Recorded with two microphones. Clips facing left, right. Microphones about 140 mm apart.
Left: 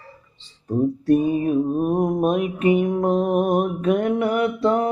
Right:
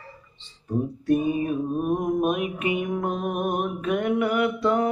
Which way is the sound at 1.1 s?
35° left (ahead or behind).